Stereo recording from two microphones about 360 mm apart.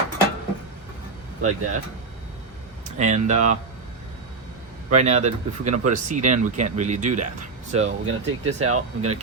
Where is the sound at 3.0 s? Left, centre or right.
Centre.